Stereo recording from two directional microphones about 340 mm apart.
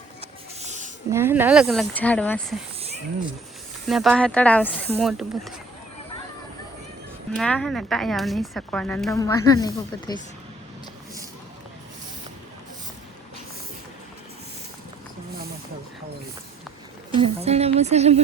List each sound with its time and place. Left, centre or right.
0.2 s a sound: centre
1.1 s speech: centre
3.8 s speech: centre
7.3 s speech: centre
17.2 s speech: centre